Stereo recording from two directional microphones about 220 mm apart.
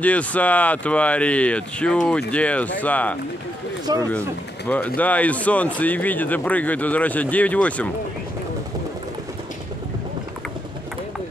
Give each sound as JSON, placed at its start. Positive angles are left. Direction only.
{"t": 0.0, "sound": "speech", "side_deg": 5}
{"t": 3.9, "sound": "speech", "side_deg": -20}
{"t": 4.6, "sound": "speech", "side_deg": 5}